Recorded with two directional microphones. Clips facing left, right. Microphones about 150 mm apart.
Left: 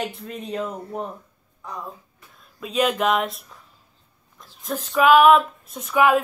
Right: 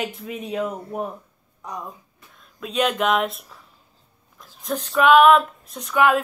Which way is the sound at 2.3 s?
Centre (ahead or behind).